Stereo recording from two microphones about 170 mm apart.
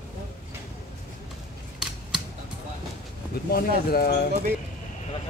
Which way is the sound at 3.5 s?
65° left (ahead or behind).